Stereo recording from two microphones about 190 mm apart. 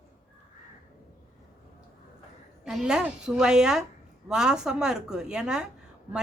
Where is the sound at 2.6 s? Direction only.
5° right (ahead or behind).